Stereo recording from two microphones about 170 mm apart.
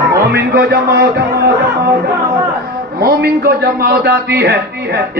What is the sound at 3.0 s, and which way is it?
A man's voice, 70° right (ahead or behind).